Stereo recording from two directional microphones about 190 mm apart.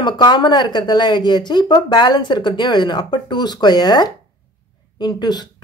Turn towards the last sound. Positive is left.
turn(degrees=20)  # may be behind; listen again after turning